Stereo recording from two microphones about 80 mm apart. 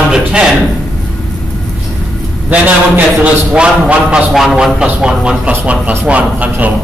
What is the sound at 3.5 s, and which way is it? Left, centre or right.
Speech, centre.